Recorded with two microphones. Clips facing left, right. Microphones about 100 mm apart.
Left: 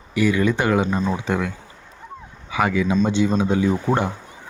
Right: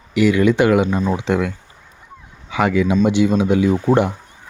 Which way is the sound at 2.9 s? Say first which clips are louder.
Right 4 dB; 10° right (ahead or behind).